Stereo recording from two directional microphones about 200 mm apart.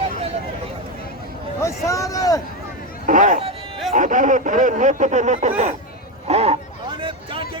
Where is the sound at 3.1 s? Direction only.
40° right (ahead or behind).